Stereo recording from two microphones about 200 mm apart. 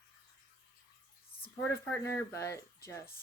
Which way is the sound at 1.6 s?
10° left (ahead or behind).